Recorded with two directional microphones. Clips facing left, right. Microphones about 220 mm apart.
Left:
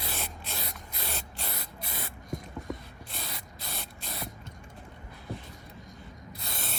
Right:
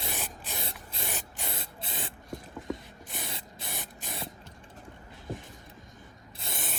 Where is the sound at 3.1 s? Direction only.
20° right (ahead or behind).